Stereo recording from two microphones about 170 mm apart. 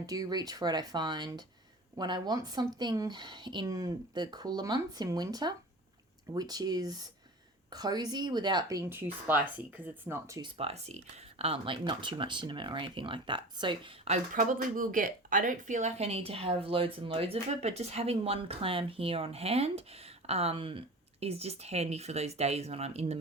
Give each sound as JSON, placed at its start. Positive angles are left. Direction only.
{"t": 0.0, "sound": "speech", "side_deg": -20}
{"t": 10.6, "sound": "speech", "side_deg": -40}
{"t": 14.3, "sound": "speech", "side_deg": -50}